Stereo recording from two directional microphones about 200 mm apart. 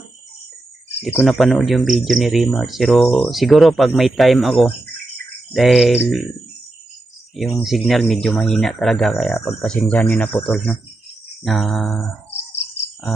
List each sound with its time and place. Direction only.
1.0 s speech: centre (ahead or behind)
7.6 s speech: centre (ahead or behind)